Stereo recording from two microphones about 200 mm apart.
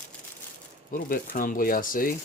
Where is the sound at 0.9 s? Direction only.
45° left (ahead or behind).